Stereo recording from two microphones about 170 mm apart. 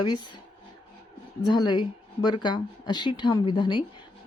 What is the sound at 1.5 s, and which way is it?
Speech, 25° left (ahead or behind).